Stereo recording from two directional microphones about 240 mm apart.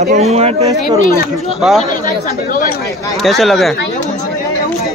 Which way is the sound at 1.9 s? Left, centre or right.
Left.